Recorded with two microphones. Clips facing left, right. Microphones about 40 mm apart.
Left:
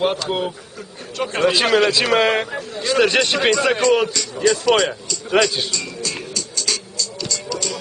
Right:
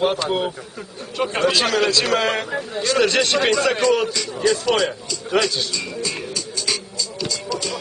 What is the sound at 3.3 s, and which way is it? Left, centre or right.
Speech, centre.